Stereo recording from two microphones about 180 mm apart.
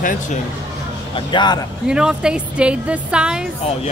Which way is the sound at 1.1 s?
25° left (ahead or behind).